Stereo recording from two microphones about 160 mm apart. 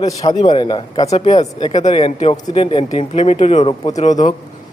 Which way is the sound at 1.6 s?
30° left (ahead or behind).